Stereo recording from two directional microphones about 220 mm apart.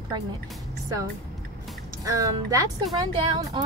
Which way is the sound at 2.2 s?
15° right (ahead or behind).